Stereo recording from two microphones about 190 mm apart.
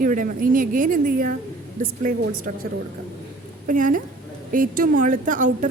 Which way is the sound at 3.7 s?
45° right (ahead or behind).